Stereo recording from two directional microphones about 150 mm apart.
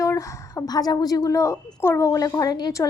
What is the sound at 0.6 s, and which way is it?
Speech, 25° left (ahead or behind).